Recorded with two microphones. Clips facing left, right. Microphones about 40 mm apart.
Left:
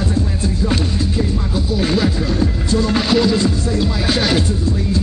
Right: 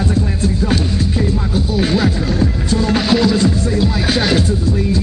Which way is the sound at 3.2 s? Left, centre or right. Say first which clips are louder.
Right 2 dB; right.